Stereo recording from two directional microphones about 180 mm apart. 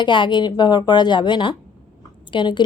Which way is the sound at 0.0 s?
25° left (ahead or behind).